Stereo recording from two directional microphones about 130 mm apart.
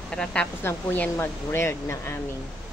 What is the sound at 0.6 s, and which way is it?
Speech, 15° left (ahead or behind).